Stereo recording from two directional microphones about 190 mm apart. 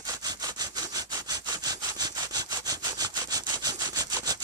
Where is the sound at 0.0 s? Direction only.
20° right (ahead or behind).